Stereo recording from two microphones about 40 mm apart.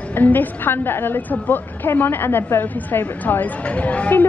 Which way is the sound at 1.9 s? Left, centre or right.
Left.